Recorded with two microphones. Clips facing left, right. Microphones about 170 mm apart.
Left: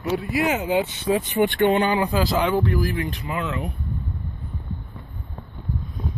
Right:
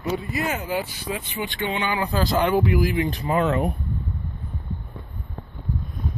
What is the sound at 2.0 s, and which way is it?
Speech, 10° left (ahead or behind).